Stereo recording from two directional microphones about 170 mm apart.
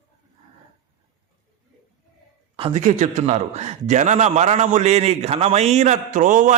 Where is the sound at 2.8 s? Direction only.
45° right (ahead or behind).